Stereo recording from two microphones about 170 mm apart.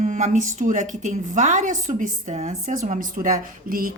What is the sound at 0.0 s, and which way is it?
A woman's voice, 45° right (ahead or behind).